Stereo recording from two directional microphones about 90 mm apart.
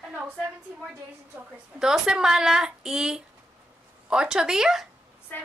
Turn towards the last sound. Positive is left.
turn(degrees=20)  # may be behind; listen again after turning